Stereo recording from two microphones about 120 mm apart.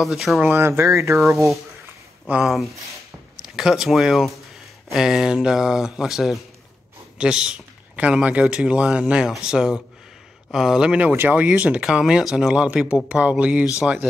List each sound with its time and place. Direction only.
0.0 s speech: centre (ahead or behind)
0.5 s speech: 20° right (ahead or behind)
2.2 s speech: 10° right (ahead or behind)
2.5 s speech: centre (ahead or behind)